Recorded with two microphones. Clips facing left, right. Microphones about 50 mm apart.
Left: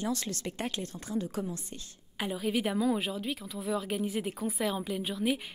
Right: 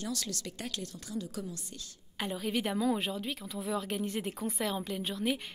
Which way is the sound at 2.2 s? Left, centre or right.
Centre.